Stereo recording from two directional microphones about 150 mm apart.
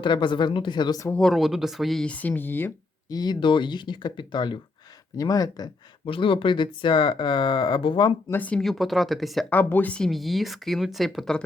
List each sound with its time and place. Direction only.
0.0 s speech: 30° left (ahead or behind)
1.1 s speech: centre (ahead or behind)
3.1 s speech: 25° left (ahead or behind)
8.3 s speech: 10° left (ahead or behind)
9.5 s speech: 10° left (ahead or behind)